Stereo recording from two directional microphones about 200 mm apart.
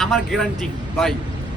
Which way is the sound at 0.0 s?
Centre (ahead or behind).